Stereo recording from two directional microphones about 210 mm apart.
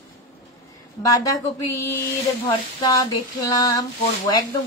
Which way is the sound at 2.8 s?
15° left (ahead or behind).